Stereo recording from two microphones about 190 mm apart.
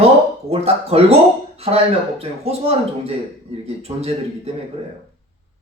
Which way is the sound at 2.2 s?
30° right (ahead or behind).